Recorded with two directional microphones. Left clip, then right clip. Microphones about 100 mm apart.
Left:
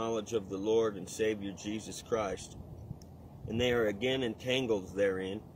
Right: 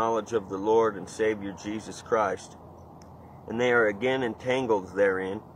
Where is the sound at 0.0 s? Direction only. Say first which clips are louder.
Right 8 dB; 35° left (ahead or behind).